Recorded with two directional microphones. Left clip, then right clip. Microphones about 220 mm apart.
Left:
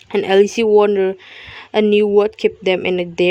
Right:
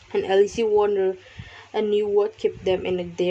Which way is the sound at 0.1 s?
40° left (ahead or behind).